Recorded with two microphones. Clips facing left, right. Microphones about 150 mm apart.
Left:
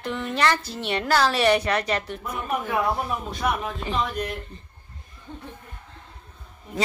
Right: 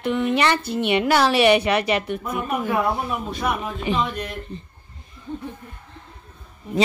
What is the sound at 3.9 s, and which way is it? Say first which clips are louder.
Speech: right 4 dB; 75° right (ahead or behind).